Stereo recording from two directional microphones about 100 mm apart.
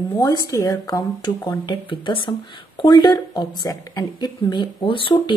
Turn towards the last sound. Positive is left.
turn(degrees=55)  # may be behind; listen again after turning